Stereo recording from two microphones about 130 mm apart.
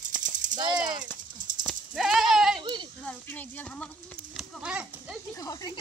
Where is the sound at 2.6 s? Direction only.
35° right (ahead or behind).